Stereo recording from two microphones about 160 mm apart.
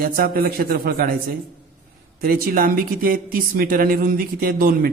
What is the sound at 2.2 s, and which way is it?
A man's voice, 65° right (ahead or behind).